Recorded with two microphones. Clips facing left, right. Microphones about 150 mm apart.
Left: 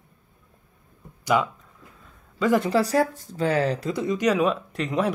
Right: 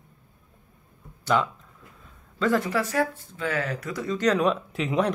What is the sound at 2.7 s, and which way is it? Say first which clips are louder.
Speech: left 4 dB; 35° left (ahead or behind).